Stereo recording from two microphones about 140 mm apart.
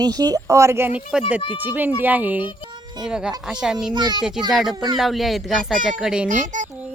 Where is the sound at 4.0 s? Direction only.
30° right (ahead or behind).